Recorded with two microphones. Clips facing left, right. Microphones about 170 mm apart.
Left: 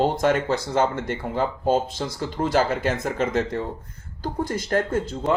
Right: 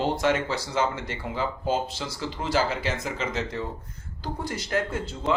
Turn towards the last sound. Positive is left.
turn(degrees=50)  # may be behind; listen again after turning